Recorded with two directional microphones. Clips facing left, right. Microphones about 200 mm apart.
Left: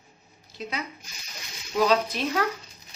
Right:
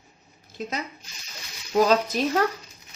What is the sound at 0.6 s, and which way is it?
Zipper, 40° right (ahead or behind).